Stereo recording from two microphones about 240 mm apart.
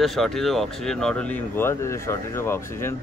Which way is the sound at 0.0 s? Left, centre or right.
Centre.